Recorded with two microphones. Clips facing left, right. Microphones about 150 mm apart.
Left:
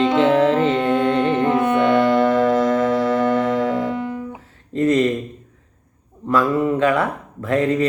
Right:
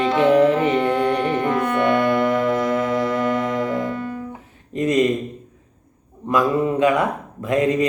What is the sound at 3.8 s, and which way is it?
Music, 20° left (ahead or behind).